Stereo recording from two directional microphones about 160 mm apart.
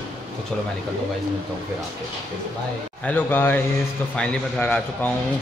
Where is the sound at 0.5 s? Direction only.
5° left (ahead or behind).